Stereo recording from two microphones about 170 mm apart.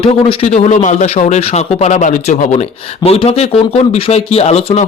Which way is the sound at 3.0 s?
35° left (ahead or behind).